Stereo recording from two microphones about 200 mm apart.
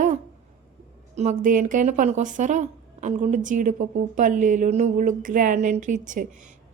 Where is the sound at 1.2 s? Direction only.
40° right (ahead or behind).